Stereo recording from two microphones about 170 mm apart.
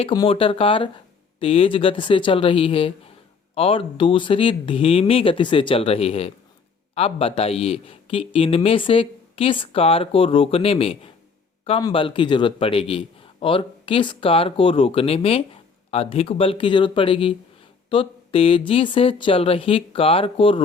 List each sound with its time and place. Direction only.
0.0 s speech: 30° left (ahead or behind)